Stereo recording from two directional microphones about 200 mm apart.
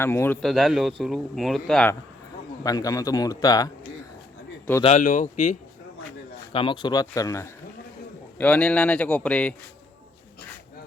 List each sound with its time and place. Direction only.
0.0 s a man's voice: 10° left (ahead or behind)
0.4 s speech: centre (ahead or behind)
2.6 s a man's voice: 15° left (ahead or behind)
4.8 s speech: 35° left (ahead or behind)
6.5 s speech: 25° left (ahead or behind); by 9.6 s 5° left (ahead or behind)